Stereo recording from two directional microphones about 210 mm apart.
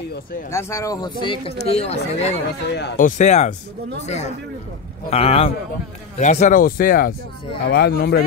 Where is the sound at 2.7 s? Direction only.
50° left (ahead or behind).